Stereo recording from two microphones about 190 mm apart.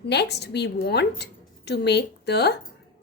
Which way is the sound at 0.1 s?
60° left (ahead or behind).